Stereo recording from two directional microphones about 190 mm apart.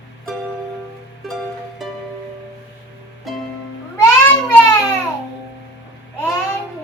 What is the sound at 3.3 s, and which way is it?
Music, centre (ahead or behind).